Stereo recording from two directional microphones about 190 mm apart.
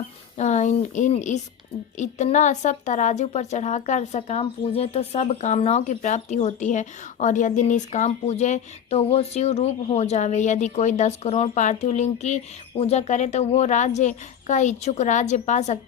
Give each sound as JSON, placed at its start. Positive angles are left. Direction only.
{"t": 0.3, "sound": "a woman's voice", "side_deg": 40}